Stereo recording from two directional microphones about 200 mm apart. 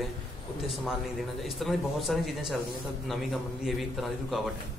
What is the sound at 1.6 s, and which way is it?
A man's voice, centre (ahead or behind).